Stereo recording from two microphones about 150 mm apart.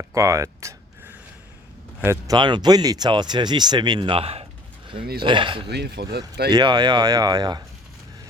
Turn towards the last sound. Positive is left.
turn(degrees=-25)  # may be behind; listen again after turning